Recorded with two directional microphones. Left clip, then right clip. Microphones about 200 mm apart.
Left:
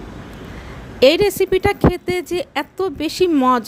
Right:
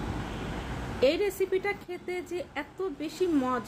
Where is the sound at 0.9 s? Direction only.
55° left (ahead or behind).